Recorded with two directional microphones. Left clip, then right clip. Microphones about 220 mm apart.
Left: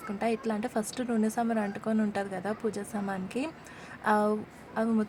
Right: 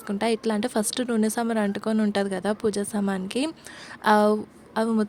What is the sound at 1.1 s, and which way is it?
A woman's voice, 60° right (ahead or behind).